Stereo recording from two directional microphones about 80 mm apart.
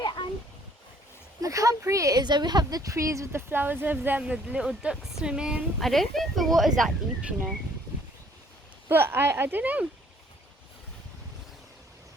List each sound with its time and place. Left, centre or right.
0.0 s a sound: left
1.4 s speech: right
2.2 s speech: right
3.5 s a woman's voice: right
5.8 s speech: centre
8.9 s speech: right